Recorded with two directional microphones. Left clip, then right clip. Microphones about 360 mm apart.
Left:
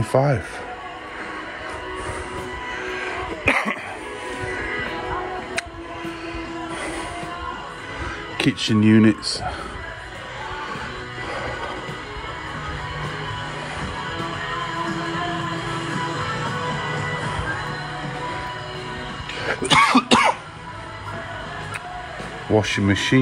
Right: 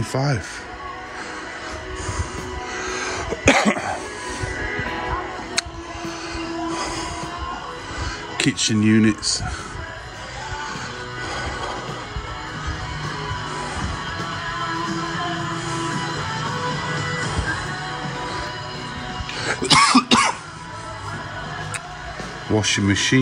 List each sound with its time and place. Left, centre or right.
0.1 s speech: centre
3.5 s cough: centre
8.4 s speech: centre
19.4 s cough: centre
22.5 s speech: centre